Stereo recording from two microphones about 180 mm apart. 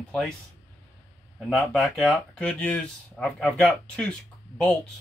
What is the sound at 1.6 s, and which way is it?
Speech, centre (ahead or behind).